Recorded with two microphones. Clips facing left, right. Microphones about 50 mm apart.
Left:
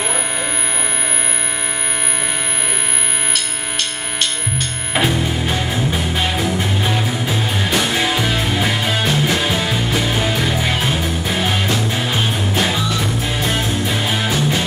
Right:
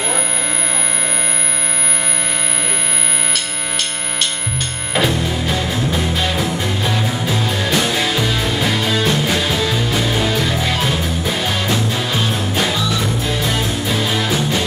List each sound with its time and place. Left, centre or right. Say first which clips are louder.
4.9 s music: even; centre
6.9 s music: even; centre
7.9 s music: even; centre
9.0 s music: even; centre
13.4 s music: even; centre